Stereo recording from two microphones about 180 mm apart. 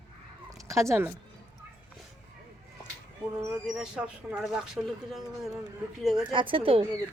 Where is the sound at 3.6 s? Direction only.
5° right (ahead or behind).